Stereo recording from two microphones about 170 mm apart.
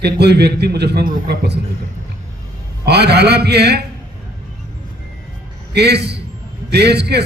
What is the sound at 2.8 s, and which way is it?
A man's voice, 75° right (ahead or behind).